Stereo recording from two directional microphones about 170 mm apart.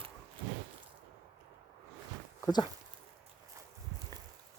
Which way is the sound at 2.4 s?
25° left (ahead or behind).